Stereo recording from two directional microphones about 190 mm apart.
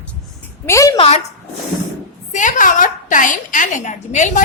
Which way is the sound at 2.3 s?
40° left (ahead or behind).